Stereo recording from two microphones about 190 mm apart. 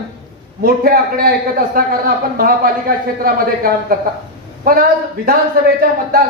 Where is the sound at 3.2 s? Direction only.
50° right (ahead or behind).